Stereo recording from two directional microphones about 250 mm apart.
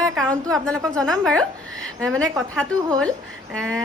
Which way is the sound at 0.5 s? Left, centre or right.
Centre.